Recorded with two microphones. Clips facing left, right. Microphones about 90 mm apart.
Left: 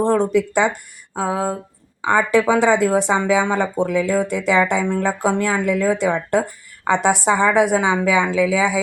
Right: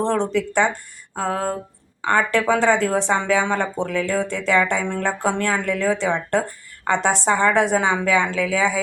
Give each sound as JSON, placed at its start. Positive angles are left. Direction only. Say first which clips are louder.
{"t": 0.0, "sound": "speech", "louder": "left 4 dB", "side_deg": 10}